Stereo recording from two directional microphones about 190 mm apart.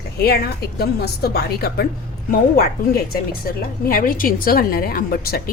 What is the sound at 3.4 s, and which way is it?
A woman's voice, 50° left (ahead or behind).